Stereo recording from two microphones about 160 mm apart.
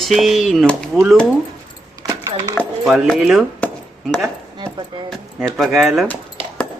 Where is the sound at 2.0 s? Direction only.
20° right (ahead or behind).